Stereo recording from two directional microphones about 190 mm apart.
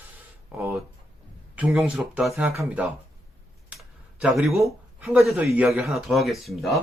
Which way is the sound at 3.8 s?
Centre (ahead or behind).